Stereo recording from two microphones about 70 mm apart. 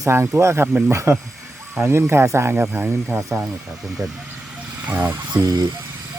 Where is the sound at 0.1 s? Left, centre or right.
Right.